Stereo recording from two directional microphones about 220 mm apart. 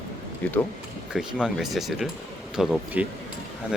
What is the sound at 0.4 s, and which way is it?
Speech, 5° left (ahead or behind).